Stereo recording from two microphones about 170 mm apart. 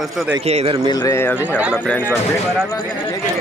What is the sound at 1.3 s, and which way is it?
Speech, 10° right (ahead or behind).